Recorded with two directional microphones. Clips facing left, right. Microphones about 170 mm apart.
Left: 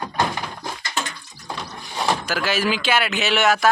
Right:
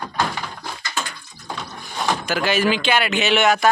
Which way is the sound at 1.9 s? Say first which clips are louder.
Even; centre (ahead or behind).